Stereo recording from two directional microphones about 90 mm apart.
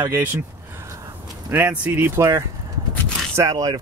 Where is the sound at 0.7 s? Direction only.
35° right (ahead or behind).